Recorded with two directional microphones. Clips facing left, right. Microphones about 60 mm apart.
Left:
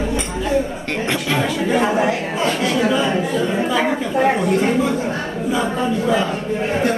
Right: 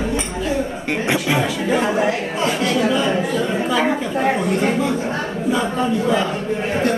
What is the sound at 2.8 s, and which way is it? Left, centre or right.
Speech, centre.